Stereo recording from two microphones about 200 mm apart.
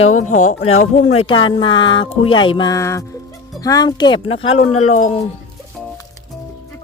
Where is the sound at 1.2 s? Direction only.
25° left (ahead or behind).